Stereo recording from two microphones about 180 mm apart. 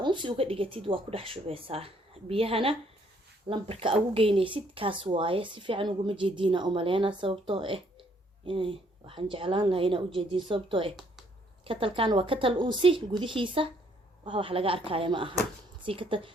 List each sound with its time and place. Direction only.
0.0 s a woman's voice: 25° right (ahead or behind)